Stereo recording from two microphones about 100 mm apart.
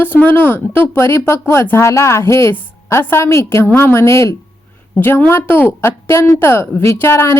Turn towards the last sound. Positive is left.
turn(degrees=25)  # may be behind; listen again after turning